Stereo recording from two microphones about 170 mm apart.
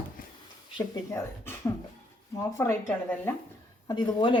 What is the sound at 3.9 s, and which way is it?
Speech, 25° left (ahead or behind).